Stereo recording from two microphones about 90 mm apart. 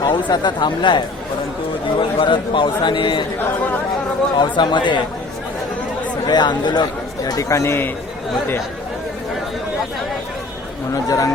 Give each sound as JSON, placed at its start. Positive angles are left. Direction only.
{"t": 0.0, "sound": "a man's voice", "side_deg": 55}
{"t": 2.0, "sound": "a man's voice", "side_deg": 75}
{"t": 4.4, "sound": "a man's voice", "side_deg": 60}
{"t": 6.2, "sound": "a man's voice", "side_deg": 55}
{"t": 7.3, "sound": "speech", "side_deg": 40}
{"t": 10.9, "sound": "speech", "side_deg": 40}